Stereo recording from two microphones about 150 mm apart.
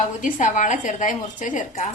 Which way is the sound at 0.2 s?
55° left (ahead or behind).